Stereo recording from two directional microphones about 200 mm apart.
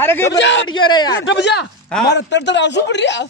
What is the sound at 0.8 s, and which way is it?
Speech, 20° left (ahead or behind).